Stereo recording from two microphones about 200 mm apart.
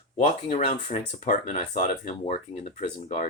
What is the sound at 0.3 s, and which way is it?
Speech, 30° left (ahead or behind).